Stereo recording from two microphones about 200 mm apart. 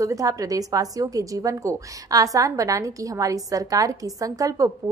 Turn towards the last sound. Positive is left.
turn(degrees=-15)  # may be behind; listen again after turning